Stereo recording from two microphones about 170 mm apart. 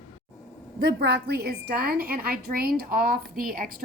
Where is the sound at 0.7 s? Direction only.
70° right (ahead or behind).